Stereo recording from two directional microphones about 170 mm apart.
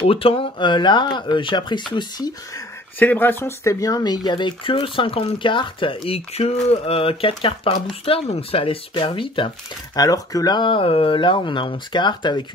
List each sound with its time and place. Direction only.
0.0 s speech: 35° left (ahead or behind)
3.0 s speech: 10° left (ahead or behind)